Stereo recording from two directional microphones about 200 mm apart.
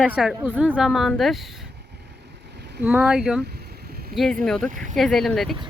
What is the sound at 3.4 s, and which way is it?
Vehicle, 55° right (ahead or behind).